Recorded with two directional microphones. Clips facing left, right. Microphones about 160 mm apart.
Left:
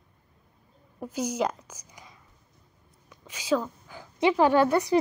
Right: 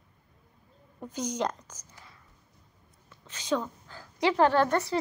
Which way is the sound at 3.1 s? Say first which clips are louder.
Left 3 dB; 10° left (ahead or behind).